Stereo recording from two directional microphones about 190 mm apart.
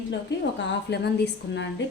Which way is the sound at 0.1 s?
65° left (ahead or behind).